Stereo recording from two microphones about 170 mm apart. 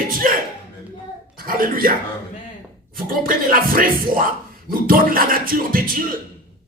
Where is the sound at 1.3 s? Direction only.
60° right (ahead or behind).